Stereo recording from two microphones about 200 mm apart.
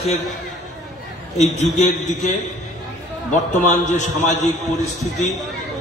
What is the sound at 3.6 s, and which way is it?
Speech, 35° left (ahead or behind).